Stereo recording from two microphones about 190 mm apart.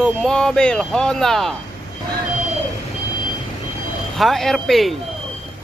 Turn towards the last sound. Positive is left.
turn(degrees=0)  # may be behind; listen again after turning